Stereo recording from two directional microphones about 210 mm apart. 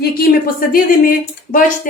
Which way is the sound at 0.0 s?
45° left (ahead or behind).